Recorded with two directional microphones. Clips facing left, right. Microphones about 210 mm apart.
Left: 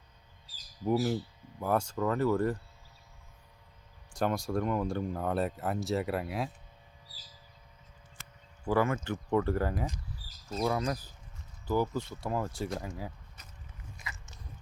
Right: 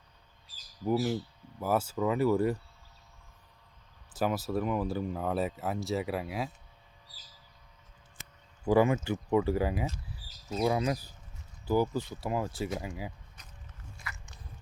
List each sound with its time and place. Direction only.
0.9 s speech: centre (ahead or behind)
4.1 s speech: 5° right (ahead or behind)
8.6 s speech: 15° right (ahead or behind)
13.9 s biting: 20° left (ahead or behind)